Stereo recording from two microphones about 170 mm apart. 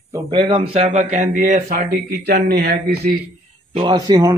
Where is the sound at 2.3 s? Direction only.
65° right (ahead or behind).